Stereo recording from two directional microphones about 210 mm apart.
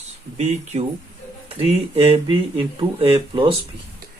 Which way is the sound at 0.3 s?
30° right (ahead or behind).